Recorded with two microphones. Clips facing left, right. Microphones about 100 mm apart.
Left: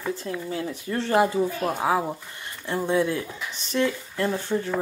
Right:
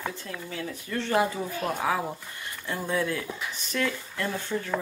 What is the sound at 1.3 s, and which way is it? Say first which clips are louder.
Speech: left 5 dB; 20° left (ahead or behind).